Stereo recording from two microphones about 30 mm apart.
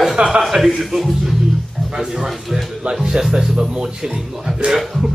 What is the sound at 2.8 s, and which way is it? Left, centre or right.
Speech, right.